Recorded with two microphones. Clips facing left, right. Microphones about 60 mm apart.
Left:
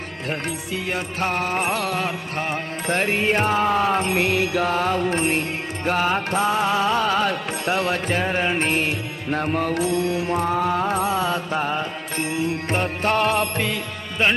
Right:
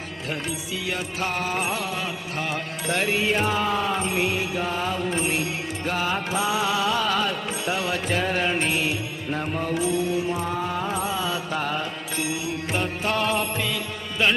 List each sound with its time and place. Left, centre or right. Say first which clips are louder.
0.4 s music: left 3 dB; left
2.4 s music: left 2 dB; left
7.5 s music: left 4 dB; left
8.1 s music: even; left
8.5 s music: left 2 dB; left
11.5 s music: left 3 dB; left
12.1 s music: left 5 dB; left
14.2 s music: left 2 dB; left